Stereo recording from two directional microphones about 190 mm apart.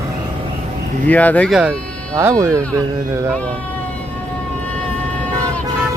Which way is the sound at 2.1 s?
15° right (ahead or behind).